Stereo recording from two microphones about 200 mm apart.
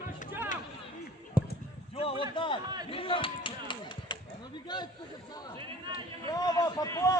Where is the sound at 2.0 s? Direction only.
25° left (ahead or behind).